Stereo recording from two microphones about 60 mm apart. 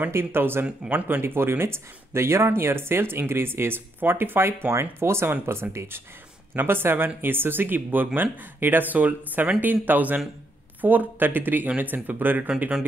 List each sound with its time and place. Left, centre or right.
0.1 s speech: right